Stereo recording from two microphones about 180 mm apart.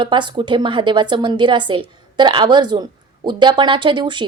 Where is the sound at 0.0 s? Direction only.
25° right (ahead or behind).